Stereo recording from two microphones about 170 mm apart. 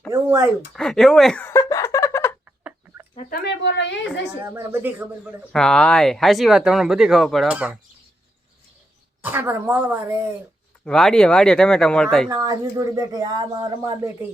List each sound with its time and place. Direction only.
0.1 s speech: 15° right (ahead or behind)
0.7 s speech: 5° left (ahead or behind)
1.5 s a sound: 15° left (ahead or behind)
2.4 s chicken: 10° right (ahead or behind)
3.2 s a woman's voice: 65° left (ahead or behind); by 4.0 s 90° left
4.4 s speech: 10° right (ahead or behind)
5.5 s speech: 5° left (ahead or behind)
9.2 s speech: 10° right (ahead or behind)
10.8 s speech: 5° left (ahead or behind)
12.3 s speech: 20° right (ahead or behind)